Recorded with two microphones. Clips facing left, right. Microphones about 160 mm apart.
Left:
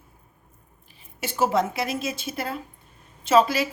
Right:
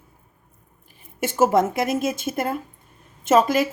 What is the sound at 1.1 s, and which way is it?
Speech, 50° right (ahead or behind).